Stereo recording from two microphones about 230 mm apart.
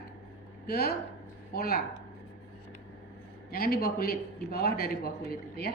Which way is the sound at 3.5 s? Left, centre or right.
Left.